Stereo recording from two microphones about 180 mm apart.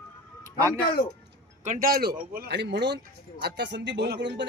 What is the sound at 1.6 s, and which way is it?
Speech, 50° right (ahead or behind).